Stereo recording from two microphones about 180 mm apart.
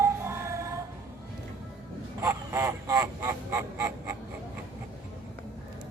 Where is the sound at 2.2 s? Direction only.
15° right (ahead or behind).